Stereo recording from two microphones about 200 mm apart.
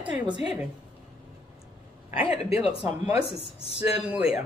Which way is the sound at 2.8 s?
5° right (ahead or behind).